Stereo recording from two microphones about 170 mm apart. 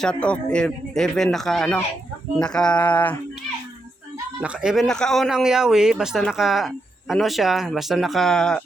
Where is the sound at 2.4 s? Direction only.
5° left (ahead or behind).